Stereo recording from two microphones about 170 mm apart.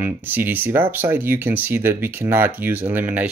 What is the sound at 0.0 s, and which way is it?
Speech, 10° right (ahead or behind).